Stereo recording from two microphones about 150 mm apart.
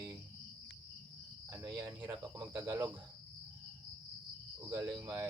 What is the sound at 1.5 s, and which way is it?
Cricket, 20° right (ahead or behind).